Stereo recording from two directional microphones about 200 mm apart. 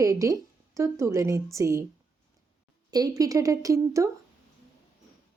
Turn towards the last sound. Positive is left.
turn(degrees=-15)  # may be behind; listen again after turning